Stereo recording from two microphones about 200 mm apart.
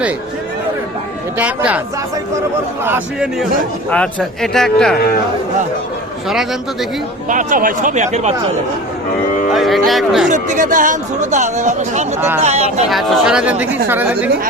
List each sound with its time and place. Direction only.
1.4 s speech: 5° right (ahead or behind)
2.8 s a man's voice: 5° right (ahead or behind)
6.2 s a man's voice: centre (ahead or behind)
7.3 s speech: 40° right (ahead or behind)
9.5 s a man's voice: centre (ahead or behind)
10.2 s speech: 40° right (ahead or behind)
12.9 s speech: centre (ahead or behind)